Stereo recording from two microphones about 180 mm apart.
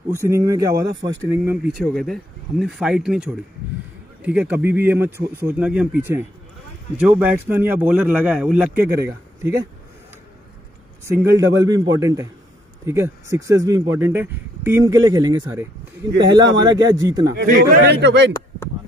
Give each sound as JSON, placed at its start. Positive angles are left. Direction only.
{"t": 0.1, "sound": "a man's voice", "side_deg": -15}
{"t": 1.3, "sound": "speech", "side_deg": -10}
{"t": 11.1, "sound": "a man's voice", "side_deg": -15}
{"t": 17.5, "sound": "a man's voice", "side_deg": -55}